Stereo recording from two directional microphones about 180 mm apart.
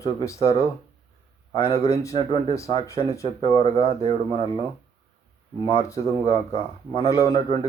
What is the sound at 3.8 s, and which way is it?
Speech, 35° right (ahead or behind).